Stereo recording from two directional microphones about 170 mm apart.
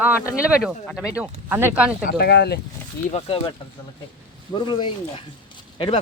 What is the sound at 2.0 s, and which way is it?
Speech, 70° left (ahead or behind).